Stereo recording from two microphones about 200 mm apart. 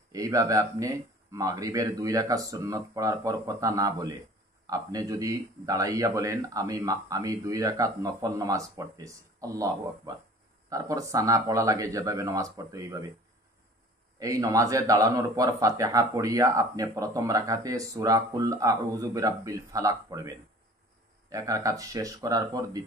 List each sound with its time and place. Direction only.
0.1 s a man's voice: 15° right (ahead or behind)
14.1 s a man's voice: 15° right (ahead or behind)